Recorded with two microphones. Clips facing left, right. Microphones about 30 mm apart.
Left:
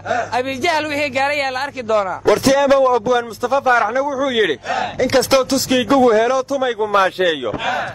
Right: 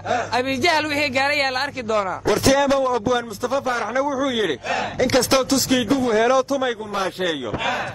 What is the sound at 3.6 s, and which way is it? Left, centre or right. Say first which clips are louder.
Speech: left 9 dB; left.